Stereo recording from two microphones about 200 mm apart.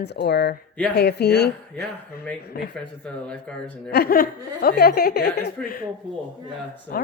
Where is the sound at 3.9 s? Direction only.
50° left (ahead or behind).